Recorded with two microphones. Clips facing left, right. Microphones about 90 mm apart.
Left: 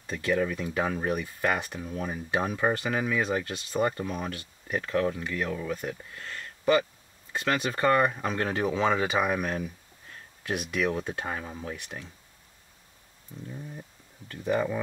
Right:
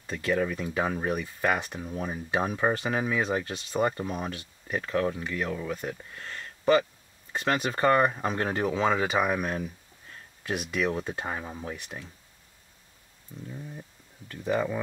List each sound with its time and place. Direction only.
0.0 s speech: centre (ahead or behind)
2.8 s speech: 25° right (ahead or behind)
4.6 s speech: centre (ahead or behind)
6.2 s a sound: 20° right (ahead or behind)
7.3 s speech: 35° right (ahead or behind); by 8.6 s 20° right (ahead or behind)
8.8 s speech: 5° right (ahead or behind)
13.5 s speech: centre (ahead or behind)